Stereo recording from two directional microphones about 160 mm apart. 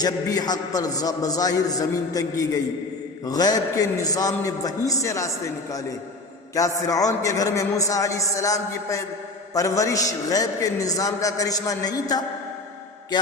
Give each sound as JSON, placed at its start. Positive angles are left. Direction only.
{"t": 0.0, "sound": "a man's voice", "side_deg": 25}
{"t": 6.8, "sound": "a man's voice", "side_deg": 20}